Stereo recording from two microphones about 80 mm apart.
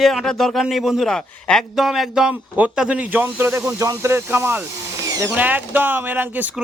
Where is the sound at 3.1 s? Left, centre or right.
Right.